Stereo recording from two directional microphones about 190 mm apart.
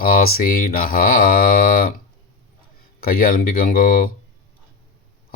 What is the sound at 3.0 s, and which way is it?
Speech, 50° left (ahead or behind).